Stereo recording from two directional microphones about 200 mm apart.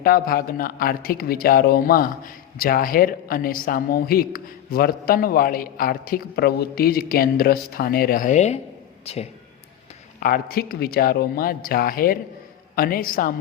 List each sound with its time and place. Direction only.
0.0 s a man's voice: 45° left (ahead or behind); by 9.2 s 30° left (ahead or behind)
10.2 s speech: 45° left (ahead or behind)